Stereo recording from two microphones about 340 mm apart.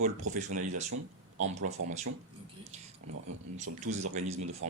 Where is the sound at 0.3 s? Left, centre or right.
Right.